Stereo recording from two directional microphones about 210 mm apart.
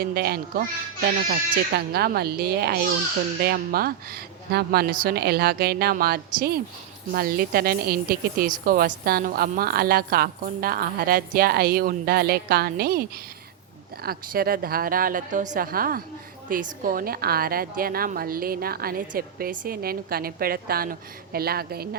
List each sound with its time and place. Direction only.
0.0 s a woman's voice: 45° right (ahead or behind)